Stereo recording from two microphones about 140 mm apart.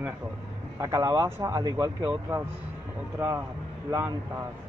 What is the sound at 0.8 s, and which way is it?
A man's voice, 25° right (ahead or behind).